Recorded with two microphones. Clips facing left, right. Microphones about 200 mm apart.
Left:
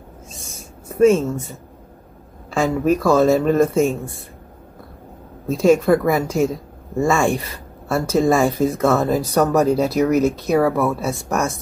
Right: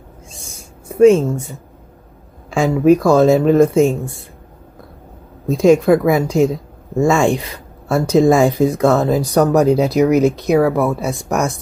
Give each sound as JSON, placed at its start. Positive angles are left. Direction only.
{"t": 1.0, "sound": "speech", "side_deg": -15}
{"t": 2.5, "sound": "speech", "side_deg": -15}
{"t": 5.5, "sound": "speech", "side_deg": -15}